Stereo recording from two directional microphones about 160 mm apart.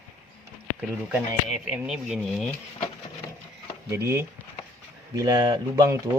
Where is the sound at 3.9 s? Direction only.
15° right (ahead or behind).